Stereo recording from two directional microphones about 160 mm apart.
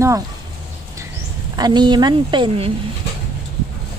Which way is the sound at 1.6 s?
25° right (ahead or behind).